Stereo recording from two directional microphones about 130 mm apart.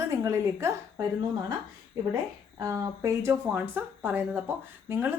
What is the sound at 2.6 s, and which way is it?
Speech, 25° right (ahead or behind).